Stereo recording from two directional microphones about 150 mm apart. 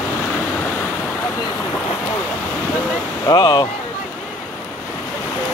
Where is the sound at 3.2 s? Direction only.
25° left (ahead or behind).